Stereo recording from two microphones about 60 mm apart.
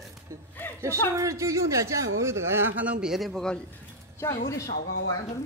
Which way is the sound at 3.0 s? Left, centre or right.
Centre.